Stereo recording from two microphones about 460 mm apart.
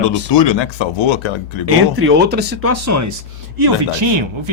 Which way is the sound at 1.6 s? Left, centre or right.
Right.